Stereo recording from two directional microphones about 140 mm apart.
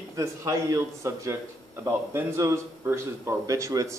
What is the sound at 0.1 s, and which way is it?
A man's voice, 20° right (ahead or behind).